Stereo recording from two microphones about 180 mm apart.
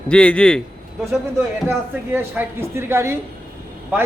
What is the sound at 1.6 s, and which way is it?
A man's voice, 10° right (ahead or behind).